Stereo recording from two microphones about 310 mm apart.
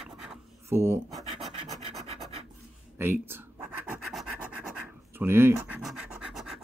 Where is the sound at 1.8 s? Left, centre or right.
Centre.